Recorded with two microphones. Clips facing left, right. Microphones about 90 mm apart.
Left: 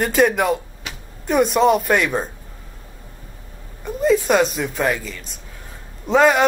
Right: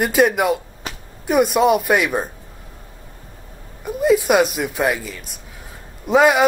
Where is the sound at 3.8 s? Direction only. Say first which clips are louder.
Right 1 dB; 10° right (ahead or behind).